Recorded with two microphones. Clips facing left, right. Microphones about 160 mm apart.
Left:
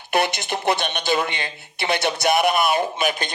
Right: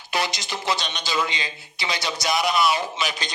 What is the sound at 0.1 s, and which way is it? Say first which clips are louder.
Speech: left 5 dB; 60° left (ahead or behind).